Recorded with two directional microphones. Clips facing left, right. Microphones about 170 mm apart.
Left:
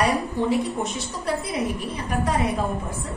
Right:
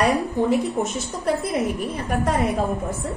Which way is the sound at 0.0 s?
50° right (ahead or behind).